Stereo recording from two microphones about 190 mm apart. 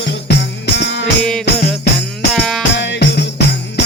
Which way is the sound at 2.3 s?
Centre (ahead or behind).